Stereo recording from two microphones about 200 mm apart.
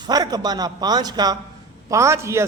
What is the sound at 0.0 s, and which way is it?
A man's voice, 20° right (ahead or behind).